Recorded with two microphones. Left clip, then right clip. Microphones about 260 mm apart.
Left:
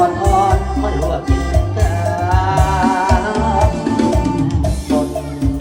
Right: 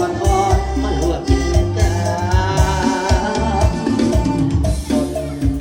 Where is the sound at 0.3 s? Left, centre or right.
Centre.